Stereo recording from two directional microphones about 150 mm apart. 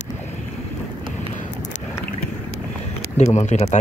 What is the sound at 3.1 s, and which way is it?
Speech, 50° left (ahead or behind).